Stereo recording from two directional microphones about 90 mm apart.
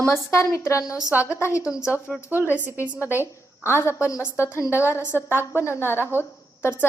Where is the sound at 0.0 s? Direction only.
30° left (ahead or behind).